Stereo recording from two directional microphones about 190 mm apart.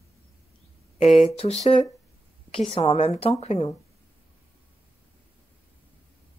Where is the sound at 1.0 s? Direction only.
35° left (ahead or behind).